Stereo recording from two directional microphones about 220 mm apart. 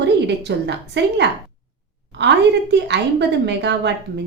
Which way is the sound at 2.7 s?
50° right (ahead or behind).